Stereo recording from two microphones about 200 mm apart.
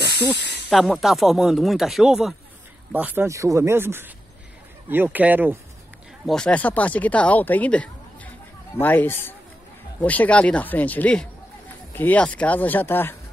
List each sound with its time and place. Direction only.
0.4 s speech: 60° left (ahead or behind)
0.7 s speech: centre (ahead or behind)
6.2 s speech: 5° left (ahead or behind)